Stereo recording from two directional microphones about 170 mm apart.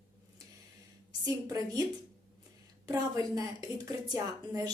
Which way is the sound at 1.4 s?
20° right (ahead or behind).